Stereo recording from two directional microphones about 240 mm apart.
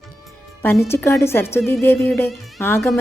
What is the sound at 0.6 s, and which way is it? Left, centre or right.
Speech, centre.